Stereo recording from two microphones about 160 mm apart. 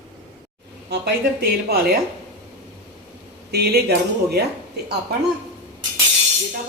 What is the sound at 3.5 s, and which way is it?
Speech, 80° right.